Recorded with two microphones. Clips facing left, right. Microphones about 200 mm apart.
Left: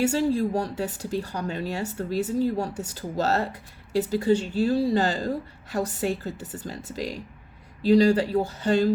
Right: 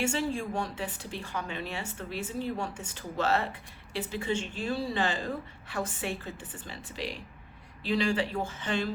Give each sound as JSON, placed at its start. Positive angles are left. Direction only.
{"t": 0.0, "sound": "a woman's voice", "side_deg": 40}